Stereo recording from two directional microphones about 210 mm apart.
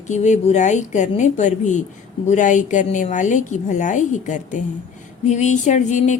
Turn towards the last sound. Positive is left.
turn(degrees=35)  # may be behind; listen again after turning